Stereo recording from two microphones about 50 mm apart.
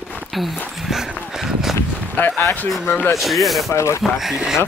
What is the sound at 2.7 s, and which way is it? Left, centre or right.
Speech, centre.